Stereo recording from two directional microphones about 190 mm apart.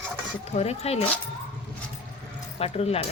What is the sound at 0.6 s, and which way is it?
Speech, 35° left (ahead or behind).